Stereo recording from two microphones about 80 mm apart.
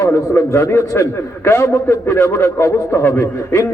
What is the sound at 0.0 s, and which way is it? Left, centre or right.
A man's voice, left.